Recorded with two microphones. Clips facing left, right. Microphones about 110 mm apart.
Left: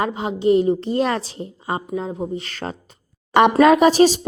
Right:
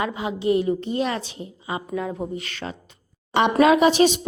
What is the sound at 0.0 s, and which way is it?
A woman's voice, 35° left (ahead or behind).